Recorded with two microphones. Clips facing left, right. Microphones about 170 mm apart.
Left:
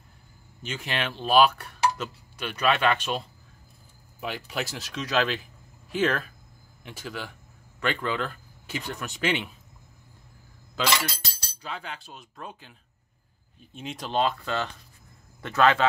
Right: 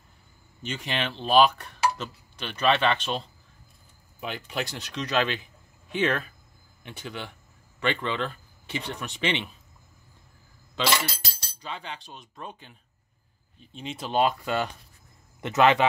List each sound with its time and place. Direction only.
0.6 s speech: 5° left (ahead or behind)
11.6 s speech: 5° left (ahead or behind)
13.7 s speech: centre (ahead or behind)
14.2 s speech: 15° right (ahead or behind)